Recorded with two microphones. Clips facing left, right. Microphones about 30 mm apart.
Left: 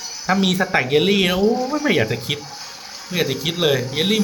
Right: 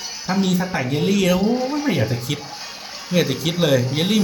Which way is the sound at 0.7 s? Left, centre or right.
Left.